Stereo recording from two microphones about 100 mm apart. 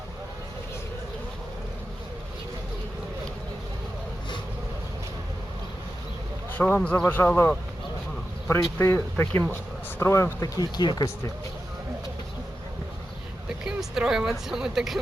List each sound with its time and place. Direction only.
6.6 s speech: 15° left (ahead or behind)
10.6 s speech: 45° left (ahead or behind)
13.7 s a woman's voice: 5° right (ahead or behind)